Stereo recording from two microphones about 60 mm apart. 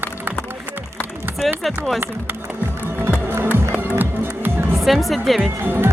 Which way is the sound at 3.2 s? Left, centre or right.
Right.